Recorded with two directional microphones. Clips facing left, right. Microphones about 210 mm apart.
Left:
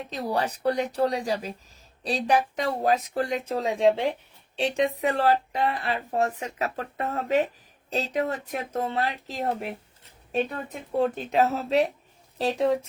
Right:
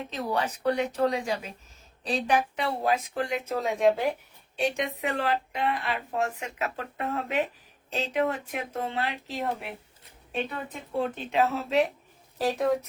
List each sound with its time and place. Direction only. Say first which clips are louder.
0.1 s speech: left 2 dB; 35° left (ahead or behind)
12.4 s speech: left 2 dB; 25° left (ahead or behind)